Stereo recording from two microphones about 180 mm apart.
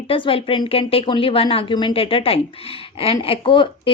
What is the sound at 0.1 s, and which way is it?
A woman's voice, 30° left (ahead or behind).